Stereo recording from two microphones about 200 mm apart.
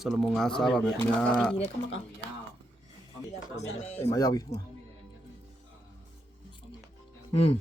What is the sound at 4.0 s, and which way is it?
Speech, 15° left (ahead or behind).